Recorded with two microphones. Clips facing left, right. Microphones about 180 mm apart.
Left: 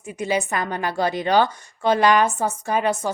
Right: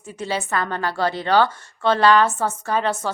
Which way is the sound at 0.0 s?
15° left (ahead or behind).